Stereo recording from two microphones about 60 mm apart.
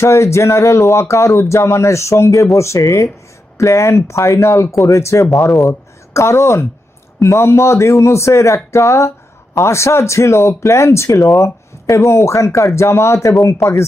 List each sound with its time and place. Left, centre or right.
0.0 s speech: left
13.6 s speech: centre